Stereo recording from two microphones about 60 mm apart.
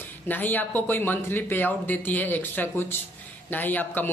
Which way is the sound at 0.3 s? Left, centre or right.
Left.